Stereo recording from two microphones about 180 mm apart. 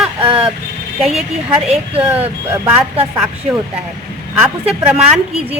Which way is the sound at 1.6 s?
35° right (ahead or behind).